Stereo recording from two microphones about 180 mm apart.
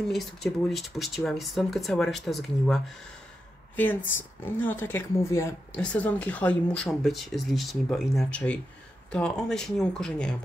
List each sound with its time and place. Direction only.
0.1 s a woman's voice: centre (ahead or behind)